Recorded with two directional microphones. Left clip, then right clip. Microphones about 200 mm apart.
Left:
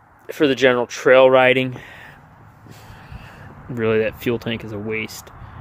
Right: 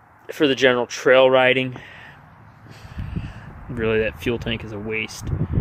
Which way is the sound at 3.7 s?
5° left (ahead or behind).